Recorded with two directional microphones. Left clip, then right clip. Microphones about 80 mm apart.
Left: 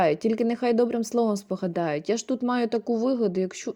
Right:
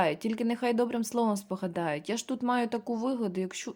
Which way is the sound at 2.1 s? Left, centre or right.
Centre.